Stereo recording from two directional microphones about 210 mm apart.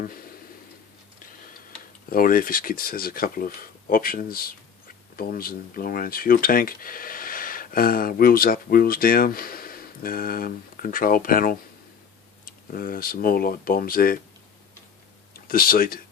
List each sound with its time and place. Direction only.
0.0 s speech: 45° left (ahead or behind)
2.0 s speech: 45° left (ahead or behind)
15.3 s speech: 45° left (ahead or behind)